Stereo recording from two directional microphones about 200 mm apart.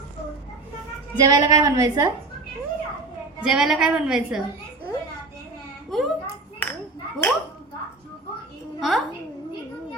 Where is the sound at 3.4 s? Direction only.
Centre (ahead or behind).